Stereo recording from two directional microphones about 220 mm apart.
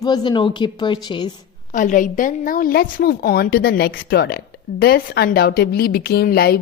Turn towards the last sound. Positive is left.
turn(degrees=45)  # may be behind; listen again after turning